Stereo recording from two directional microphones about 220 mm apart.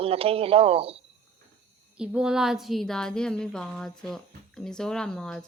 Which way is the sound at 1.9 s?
5° right (ahead or behind).